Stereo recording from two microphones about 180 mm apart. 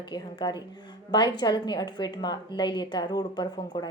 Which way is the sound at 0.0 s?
25° left (ahead or behind).